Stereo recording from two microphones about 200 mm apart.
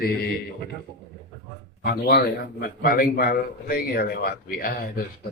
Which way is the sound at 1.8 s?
50° left (ahead or behind).